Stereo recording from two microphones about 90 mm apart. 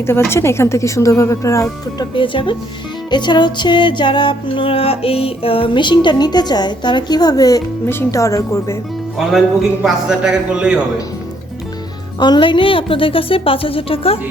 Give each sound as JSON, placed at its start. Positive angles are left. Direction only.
{"t": 0.3, "sound": "speech", "side_deg": 30}
{"t": 2.1, "sound": "speech", "side_deg": 65}
{"t": 3.1, "sound": "music", "side_deg": 55}
{"t": 7.9, "sound": "speech", "side_deg": 30}
{"t": 9.1, "sound": "a man's voice", "side_deg": 0}
{"t": 12.2, "sound": "a woman's voice", "side_deg": 60}